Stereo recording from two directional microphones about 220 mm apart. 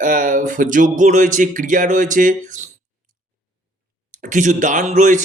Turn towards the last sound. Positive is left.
turn(degrees=-35)  # may be behind; listen again after turning